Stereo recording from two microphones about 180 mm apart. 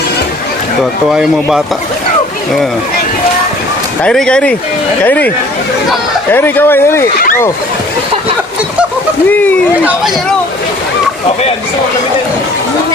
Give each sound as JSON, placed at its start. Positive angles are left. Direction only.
{"t": 1.1, "sound": "speech", "side_deg": -5}
{"t": 4.0, "sound": "speech", "side_deg": 5}
{"t": 6.3, "sound": "speech", "side_deg": 10}
{"t": 7.2, "sound": "speech", "side_deg": 50}
{"t": 9.3, "sound": "speech", "side_deg": 10}
{"t": 9.7, "sound": "speech", "side_deg": -10}